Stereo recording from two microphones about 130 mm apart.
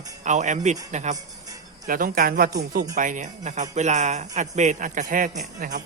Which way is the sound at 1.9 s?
90° right.